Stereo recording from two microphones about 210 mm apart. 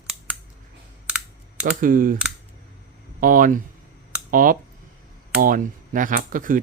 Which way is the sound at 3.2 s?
40° right (ahead or behind).